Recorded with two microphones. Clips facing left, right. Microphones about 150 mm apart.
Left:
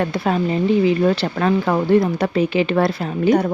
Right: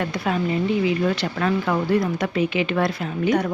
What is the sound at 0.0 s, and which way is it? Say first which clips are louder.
Speech: left 4 dB; 35° left (ahead or behind).